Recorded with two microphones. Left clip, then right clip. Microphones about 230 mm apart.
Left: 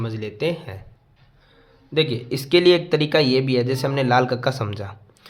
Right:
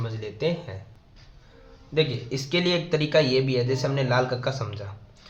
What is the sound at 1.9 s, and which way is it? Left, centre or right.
A man's voice, left.